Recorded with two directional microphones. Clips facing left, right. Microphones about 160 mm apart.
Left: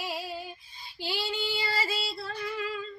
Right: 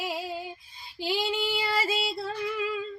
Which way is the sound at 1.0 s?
15° right (ahead or behind).